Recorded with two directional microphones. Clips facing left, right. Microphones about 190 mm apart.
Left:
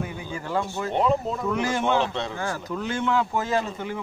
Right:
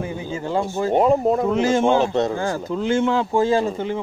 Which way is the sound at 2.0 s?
40° right (ahead or behind).